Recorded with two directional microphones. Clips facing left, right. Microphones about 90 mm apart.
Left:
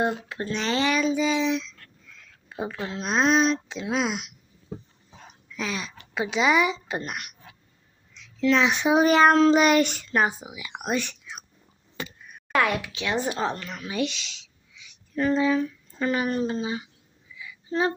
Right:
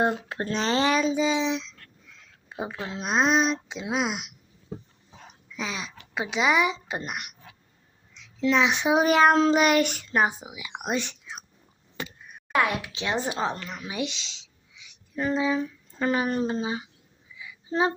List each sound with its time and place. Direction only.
0.0 s speech: 35° right (ahead or behind); by 4.3 s 15° right (ahead or behind)
5.5 s a sound: 15° right (ahead or behind)
6.3 s a child's voice: 10° right (ahead or behind)
10.1 s speech: 20° right (ahead or behind)
12.5 s a child's voice: 15° right (ahead or behind)
16.0 s speech: 30° right (ahead or behind)
17.3 s a sound: 20° right (ahead or behind)